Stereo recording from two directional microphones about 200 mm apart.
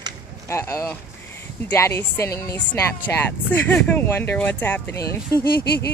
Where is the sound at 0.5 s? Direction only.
15° left (ahead or behind).